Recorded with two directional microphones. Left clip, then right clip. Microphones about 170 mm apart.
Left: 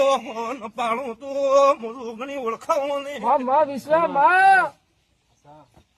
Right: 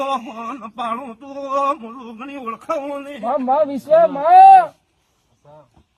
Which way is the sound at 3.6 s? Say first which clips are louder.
Right 6 dB; 20° left (ahead or behind).